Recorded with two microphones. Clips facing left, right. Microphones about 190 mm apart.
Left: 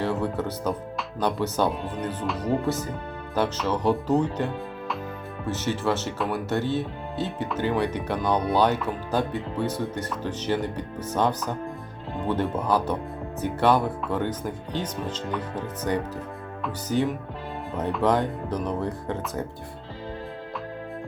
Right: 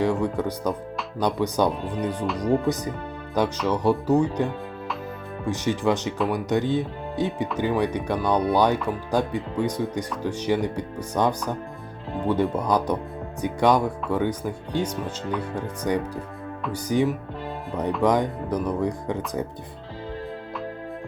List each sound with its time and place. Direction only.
0.0 s speech: 15° right (ahead or behind)
5.5 s speech: 15° right (ahead or behind)